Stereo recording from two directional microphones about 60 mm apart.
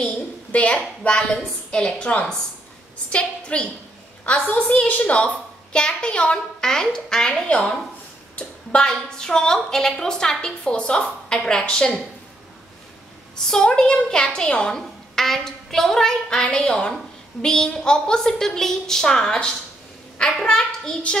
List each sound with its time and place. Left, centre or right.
0.5 s a woman's voice: left
13.4 s a woman's voice: centre